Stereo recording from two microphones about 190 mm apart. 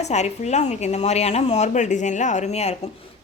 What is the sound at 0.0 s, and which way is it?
A woman's voice, 35° left (ahead or behind).